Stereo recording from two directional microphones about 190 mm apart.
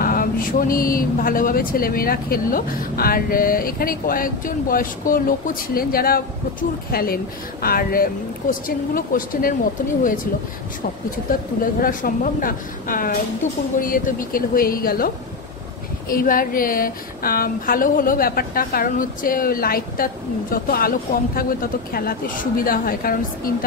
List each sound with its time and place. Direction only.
0.0 s speech: 50° left (ahead or behind)
11.6 s speech: 45° left (ahead or behind)
16.1 s speech: 50° left (ahead or behind)